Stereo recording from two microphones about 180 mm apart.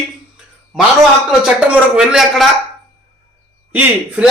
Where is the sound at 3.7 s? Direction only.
10° right (ahead or behind).